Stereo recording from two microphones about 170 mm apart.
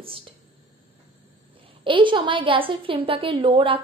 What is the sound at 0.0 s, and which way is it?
Speech, 35° right (ahead or behind).